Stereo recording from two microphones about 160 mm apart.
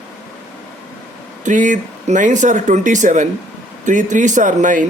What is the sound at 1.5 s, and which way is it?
Speech, 50° right (ahead or behind).